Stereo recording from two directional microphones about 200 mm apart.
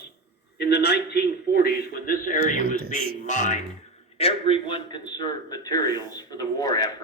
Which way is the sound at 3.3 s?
35° left (ahead or behind).